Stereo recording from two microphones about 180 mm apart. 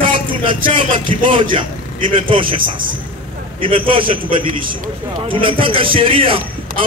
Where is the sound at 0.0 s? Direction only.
30° right (ahead or behind).